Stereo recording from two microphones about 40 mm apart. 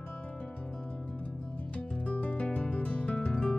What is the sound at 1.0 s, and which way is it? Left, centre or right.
Music, left.